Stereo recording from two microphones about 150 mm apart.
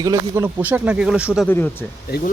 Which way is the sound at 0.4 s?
10° right (ahead or behind).